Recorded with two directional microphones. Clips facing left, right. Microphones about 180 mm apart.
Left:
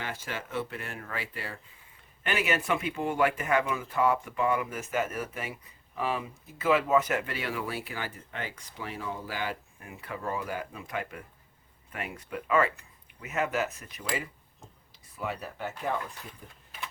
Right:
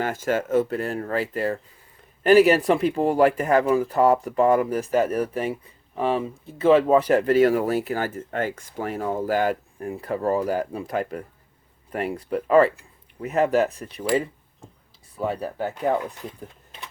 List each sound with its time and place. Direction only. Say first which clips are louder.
0.0 s speech: right 13 dB; 45° right (ahead or behind)